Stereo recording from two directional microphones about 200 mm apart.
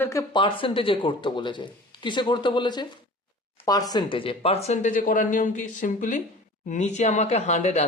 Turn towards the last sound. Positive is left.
turn(degrees=35)  # may be behind; listen again after turning